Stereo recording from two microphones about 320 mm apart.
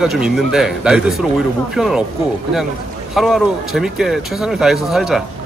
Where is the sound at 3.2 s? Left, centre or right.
Centre.